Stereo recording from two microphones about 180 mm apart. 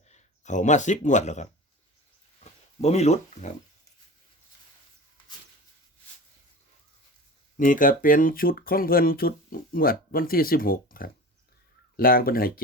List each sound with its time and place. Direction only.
0.1 s speech: 40° left (ahead or behind)
2.4 s a sound: 35° left (ahead or behind)
7.5 s speech: 50° left (ahead or behind)